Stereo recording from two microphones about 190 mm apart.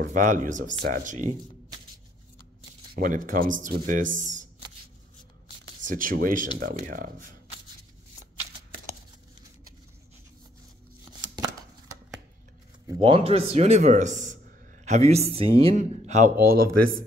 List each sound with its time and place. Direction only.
0.0 s speech: 45° right (ahead or behind)
3.0 s speech: 45° right (ahead or behind)
5.9 s speech: 45° right (ahead or behind)
11.3 s shuffling cards: 20° right (ahead or behind)
13.0 s speech: 30° right (ahead or behind)